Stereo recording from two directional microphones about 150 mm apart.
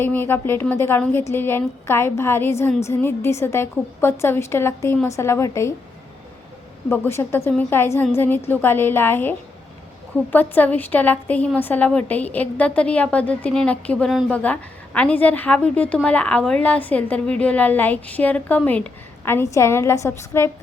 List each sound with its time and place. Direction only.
0.0 s a woman's voice: 15° left (ahead or behind)
6.9 s a woman's voice: 15° left (ahead or behind)
10.3 s a woman's voice: 10° left (ahead or behind)